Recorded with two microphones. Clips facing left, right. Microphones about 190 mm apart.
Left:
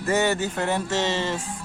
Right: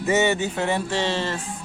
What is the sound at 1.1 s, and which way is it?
Music, 10° left (ahead or behind).